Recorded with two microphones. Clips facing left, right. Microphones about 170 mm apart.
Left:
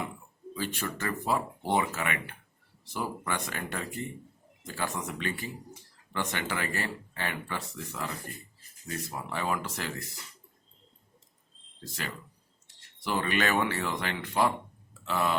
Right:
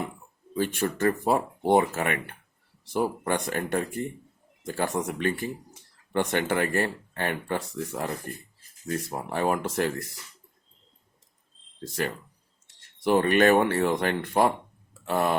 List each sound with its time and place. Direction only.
0.5 s speech: 55° right (ahead or behind)
13.1 s speech: 50° right (ahead or behind)